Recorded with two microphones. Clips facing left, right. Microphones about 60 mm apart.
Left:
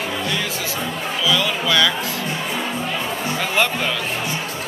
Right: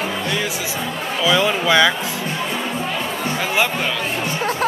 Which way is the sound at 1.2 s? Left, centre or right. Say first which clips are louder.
Right 4 dB; right.